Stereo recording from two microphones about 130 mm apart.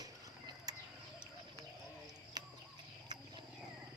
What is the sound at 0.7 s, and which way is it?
Bird, 30° right (ahead or behind).